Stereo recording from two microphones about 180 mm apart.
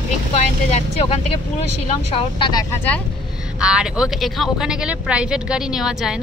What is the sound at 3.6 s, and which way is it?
Speech, 5° right (ahead or behind).